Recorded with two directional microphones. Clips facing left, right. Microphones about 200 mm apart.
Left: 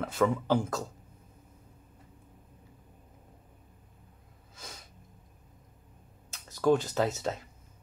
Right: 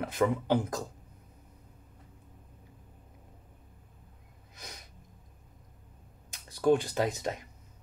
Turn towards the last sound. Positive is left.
turn(degrees=-15)  # may be behind; listen again after turning